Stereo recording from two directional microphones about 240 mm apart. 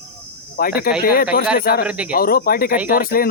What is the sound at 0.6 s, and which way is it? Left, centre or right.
Speech, left.